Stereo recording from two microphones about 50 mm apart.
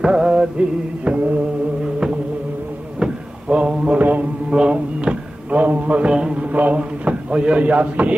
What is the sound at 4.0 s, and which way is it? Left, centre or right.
Mantra, right.